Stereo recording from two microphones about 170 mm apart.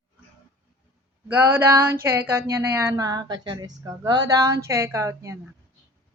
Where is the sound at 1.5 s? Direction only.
15° right (ahead or behind).